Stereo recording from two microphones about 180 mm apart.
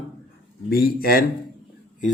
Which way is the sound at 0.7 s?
60° left (ahead or behind).